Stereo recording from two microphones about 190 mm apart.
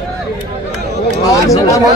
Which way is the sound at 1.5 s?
15° left (ahead or behind).